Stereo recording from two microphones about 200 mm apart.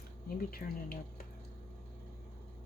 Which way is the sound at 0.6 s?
45° left (ahead or behind).